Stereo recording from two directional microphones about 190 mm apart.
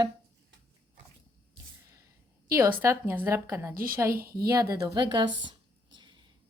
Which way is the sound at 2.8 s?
10° right (ahead or behind).